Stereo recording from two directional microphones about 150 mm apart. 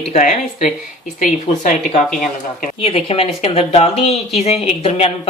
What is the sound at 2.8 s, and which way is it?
A woman's voice, 40° left (ahead or behind).